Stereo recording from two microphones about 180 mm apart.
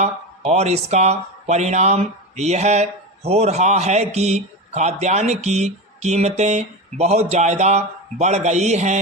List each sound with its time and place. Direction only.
0.0 s speech: 35° right (ahead or behind)